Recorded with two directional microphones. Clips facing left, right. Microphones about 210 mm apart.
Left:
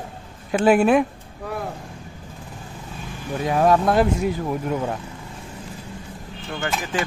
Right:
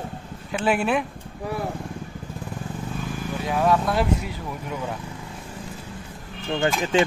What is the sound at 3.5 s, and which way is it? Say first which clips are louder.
Speech: left 4 dB; 45° left (ahead or behind).